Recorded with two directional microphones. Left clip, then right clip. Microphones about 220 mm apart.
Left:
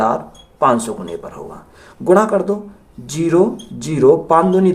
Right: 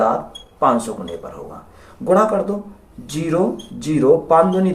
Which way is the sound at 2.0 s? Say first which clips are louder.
Left 2 dB; 40° left (ahead or behind).